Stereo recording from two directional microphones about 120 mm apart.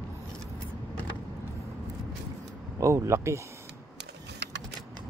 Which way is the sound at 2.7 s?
25° right (ahead or behind).